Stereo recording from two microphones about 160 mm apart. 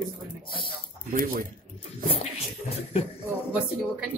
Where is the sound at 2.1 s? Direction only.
35° left (ahead or behind).